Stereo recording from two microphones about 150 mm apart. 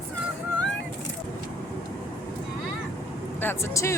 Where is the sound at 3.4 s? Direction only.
15° left (ahead or behind).